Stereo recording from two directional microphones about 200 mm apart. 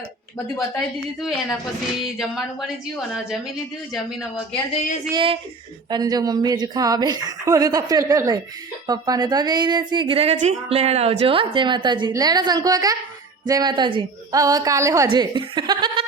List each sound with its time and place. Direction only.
0.5 s a woman's voice: centre (ahead or behind)
4.7 s speech: 40° left (ahead or behind)
5.1 s speech: 25° right (ahead or behind)